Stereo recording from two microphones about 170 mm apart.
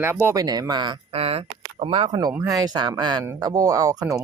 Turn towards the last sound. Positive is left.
turn(degrees=-20)  # may be behind; listen again after turning